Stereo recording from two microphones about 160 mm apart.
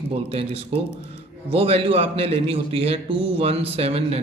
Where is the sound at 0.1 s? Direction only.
40° right (ahead or behind).